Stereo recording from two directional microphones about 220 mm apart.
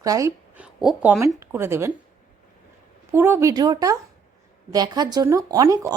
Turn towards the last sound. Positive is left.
turn(degrees=-15)  # may be behind; listen again after turning